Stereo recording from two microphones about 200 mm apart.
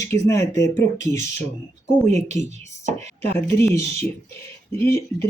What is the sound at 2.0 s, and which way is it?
Speech, 35° right (ahead or behind).